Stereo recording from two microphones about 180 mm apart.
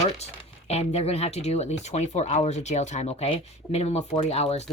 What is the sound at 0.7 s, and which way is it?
Speech, 35° left (ahead or behind).